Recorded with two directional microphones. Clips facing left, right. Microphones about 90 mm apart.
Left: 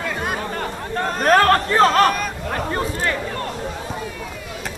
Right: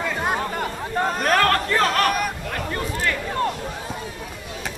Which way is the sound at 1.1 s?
35° left (ahead or behind).